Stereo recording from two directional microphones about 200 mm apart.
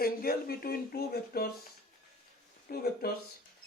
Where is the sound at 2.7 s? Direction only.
50° left (ahead or behind).